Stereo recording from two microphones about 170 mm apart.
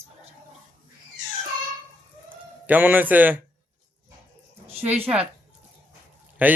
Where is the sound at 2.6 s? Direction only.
10° right (ahead or behind).